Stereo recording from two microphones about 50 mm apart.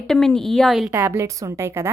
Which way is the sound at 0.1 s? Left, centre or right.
Centre.